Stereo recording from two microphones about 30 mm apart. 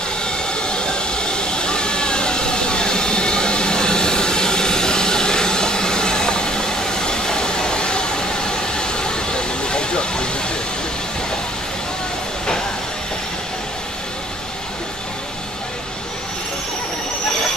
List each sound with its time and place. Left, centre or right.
0.2 s train: left